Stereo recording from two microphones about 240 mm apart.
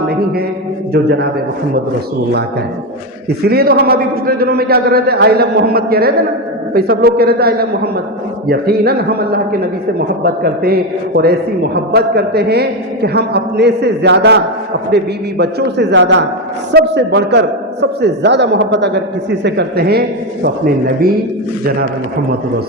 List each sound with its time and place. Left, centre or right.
3.5 s a man's voice: right